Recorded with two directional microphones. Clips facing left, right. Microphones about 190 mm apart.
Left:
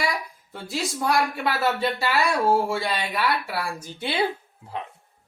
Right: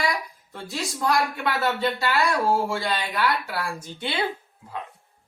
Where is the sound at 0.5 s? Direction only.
5° left (ahead or behind).